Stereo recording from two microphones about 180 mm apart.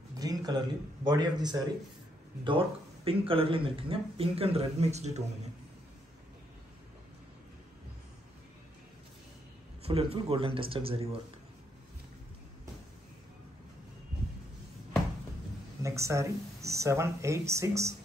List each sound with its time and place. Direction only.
0.2 s speech: 20° right (ahead or behind)
3.1 s speech: 30° right (ahead or behind)
9.8 s speech: 35° right (ahead or behind)
15.8 s speech: 15° right (ahead or behind)